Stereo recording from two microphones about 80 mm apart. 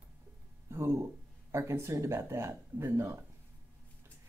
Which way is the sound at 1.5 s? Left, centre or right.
Right.